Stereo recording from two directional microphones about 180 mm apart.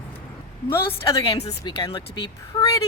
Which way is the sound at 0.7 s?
25° left (ahead or behind).